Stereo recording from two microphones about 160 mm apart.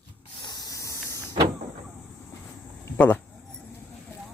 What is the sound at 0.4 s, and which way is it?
Spray, 25° left (ahead or behind).